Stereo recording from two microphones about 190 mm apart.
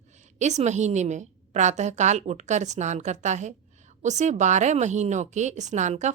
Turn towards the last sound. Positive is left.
turn(degrees=-40)  # may be behind; listen again after turning